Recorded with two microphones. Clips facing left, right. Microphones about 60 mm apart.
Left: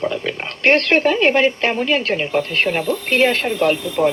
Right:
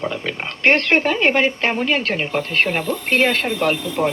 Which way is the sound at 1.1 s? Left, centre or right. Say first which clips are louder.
Left 2 dB; right.